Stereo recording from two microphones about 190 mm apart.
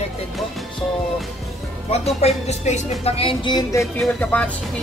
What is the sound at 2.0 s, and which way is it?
Speech, 35° left (ahead or behind).